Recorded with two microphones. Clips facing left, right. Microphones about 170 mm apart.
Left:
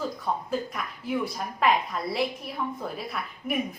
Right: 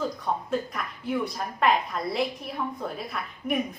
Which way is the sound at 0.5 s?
Centre (ahead or behind).